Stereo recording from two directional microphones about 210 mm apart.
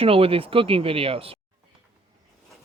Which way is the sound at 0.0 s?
25° right (ahead or behind).